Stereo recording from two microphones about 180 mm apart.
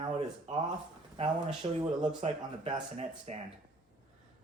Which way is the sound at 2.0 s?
40° right (ahead or behind).